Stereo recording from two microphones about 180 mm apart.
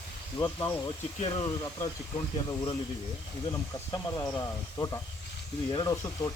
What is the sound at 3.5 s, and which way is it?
Speech, 15° left (ahead or behind).